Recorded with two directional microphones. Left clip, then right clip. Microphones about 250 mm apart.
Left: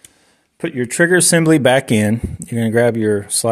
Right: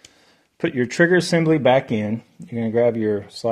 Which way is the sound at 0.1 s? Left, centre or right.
Centre.